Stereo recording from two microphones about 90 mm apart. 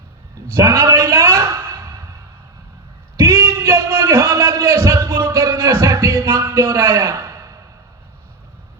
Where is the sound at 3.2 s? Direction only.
30° right (ahead or behind).